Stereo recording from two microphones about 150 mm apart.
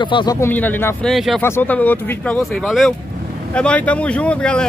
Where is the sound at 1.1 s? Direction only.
Centre (ahead or behind).